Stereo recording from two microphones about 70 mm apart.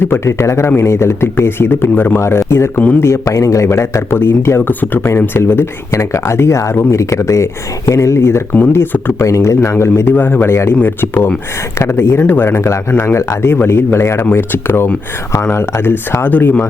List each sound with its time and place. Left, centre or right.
0.0 s speech: left
3.2 s speech: left
9.1 s speech: left